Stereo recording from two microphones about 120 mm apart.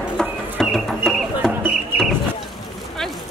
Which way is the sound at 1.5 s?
15° right (ahead or behind).